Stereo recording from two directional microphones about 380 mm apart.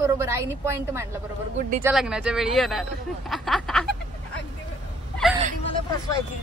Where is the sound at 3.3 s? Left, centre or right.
Centre.